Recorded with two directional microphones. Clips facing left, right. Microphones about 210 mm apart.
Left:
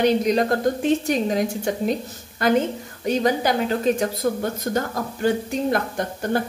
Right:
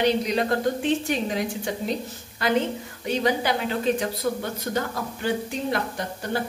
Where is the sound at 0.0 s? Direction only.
45° left (ahead or behind).